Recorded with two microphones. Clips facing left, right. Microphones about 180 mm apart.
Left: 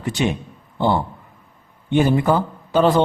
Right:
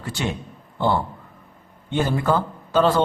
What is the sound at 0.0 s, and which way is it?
Speech, 15° left (ahead or behind).